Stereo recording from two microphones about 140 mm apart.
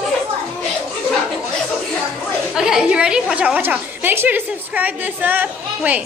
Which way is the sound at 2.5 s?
5° right (ahead or behind).